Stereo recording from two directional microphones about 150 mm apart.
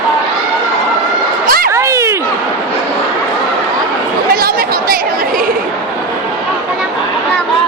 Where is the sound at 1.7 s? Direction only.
20° right (ahead or behind).